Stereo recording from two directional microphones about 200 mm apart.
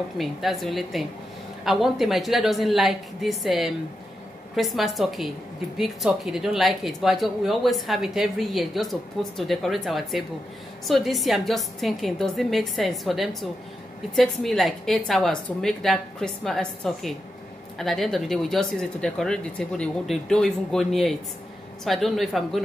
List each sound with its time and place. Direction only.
0.2 s speech: centre (ahead or behind)